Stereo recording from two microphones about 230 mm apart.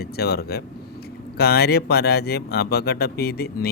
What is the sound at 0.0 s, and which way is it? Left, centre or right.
Speech, left.